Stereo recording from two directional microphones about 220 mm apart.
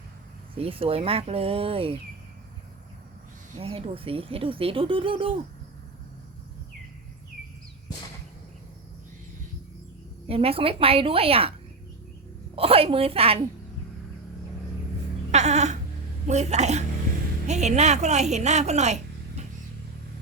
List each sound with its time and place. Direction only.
0.5 s speech: 25° right (ahead or behind)
3.6 s speech: 25° right (ahead or behind)
10.2 s speech: 25° right (ahead or behind)
12.5 s speech: 25° right (ahead or behind)
15.3 s music: 30° right (ahead or behind)
16.2 s speech: 30° right (ahead or behind)